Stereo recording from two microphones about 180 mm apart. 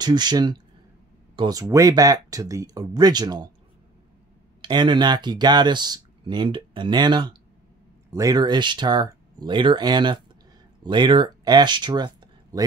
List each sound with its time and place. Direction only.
0.0 s speech: 25° right (ahead or behind)
4.6 s speech: 25° right (ahead or behind)